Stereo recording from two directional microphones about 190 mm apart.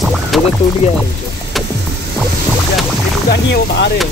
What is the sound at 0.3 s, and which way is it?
Music, centre (ahead or behind).